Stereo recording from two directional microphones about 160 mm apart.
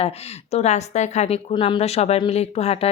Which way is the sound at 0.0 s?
40° left (ahead or behind).